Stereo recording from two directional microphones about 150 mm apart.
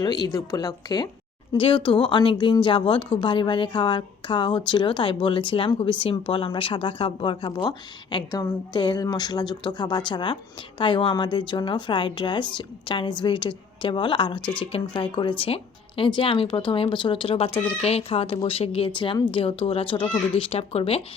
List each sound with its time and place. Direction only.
0.0 s a woman's voice: 30° left (ahead or behind)